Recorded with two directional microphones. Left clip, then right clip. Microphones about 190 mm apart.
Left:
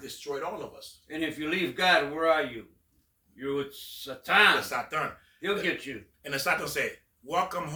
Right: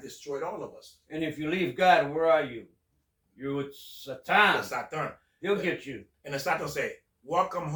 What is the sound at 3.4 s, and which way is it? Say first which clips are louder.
Speech: left 2 dB; 5° right (ahead or behind).